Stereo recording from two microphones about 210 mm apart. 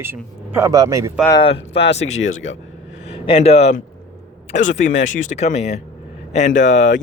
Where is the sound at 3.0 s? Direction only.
25° left (ahead or behind).